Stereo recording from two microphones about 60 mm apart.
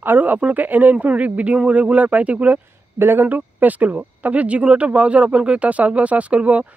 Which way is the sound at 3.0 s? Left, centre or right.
Right.